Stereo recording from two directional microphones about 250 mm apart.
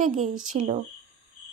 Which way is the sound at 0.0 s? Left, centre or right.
Right.